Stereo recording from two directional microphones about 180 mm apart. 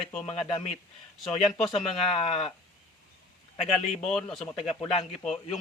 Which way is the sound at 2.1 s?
30° left (ahead or behind).